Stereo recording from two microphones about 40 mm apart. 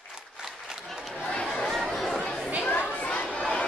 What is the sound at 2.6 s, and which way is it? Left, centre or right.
Chatter, left.